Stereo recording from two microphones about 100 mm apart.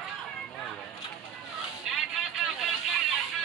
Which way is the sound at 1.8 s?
5° right (ahead or behind).